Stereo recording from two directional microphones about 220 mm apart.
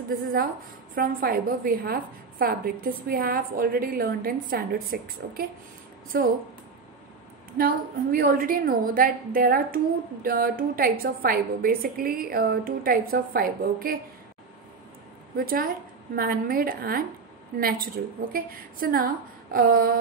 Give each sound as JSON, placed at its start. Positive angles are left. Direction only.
{"t": 0.9, "sound": "a woman's voice", "side_deg": -40}
{"t": 7.5, "sound": "a woman's voice", "side_deg": -40}
{"t": 15.3, "sound": "a woman's voice", "side_deg": -40}